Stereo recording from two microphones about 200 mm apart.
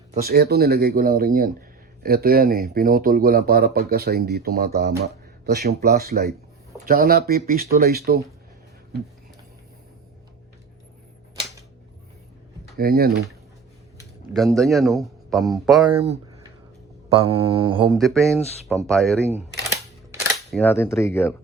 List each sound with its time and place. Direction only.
0.2 s speech: 50° right (ahead or behind)
12.7 s speech: 50° right (ahead or behind)
14.3 s speech: centre (ahead or behind)
17.2 s mantra: 25° right (ahead or behind)
17.8 s speech: centre (ahead or behind)
19.3 s camera: 15° right (ahead or behind)
20.5 s speech: 10° left (ahead or behind)